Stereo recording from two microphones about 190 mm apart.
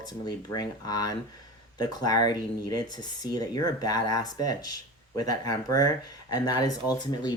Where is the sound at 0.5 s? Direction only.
20° left (ahead or behind).